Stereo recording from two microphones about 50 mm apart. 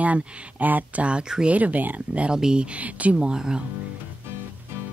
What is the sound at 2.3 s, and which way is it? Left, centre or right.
Speech, centre.